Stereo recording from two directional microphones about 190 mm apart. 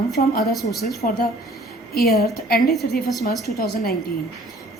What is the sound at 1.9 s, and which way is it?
Speech, 55° left (ahead or behind).